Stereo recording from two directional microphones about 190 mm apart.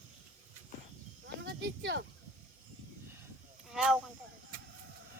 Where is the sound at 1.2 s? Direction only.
65° right (ahead or behind).